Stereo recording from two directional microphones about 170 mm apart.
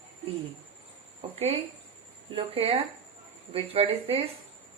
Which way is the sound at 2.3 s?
30° right (ahead or behind).